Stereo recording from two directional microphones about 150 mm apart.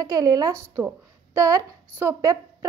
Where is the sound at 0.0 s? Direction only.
25° right (ahead or behind).